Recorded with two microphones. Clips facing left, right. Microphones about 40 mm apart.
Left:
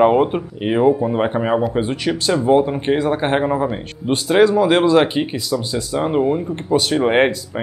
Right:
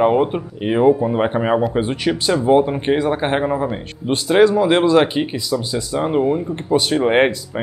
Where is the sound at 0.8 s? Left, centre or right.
Centre.